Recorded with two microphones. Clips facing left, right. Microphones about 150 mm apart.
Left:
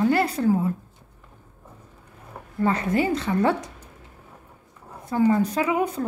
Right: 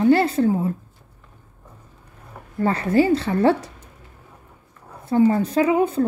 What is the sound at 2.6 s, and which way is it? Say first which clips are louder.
A woman's voice: right 4 dB; 30° right (ahead or behind).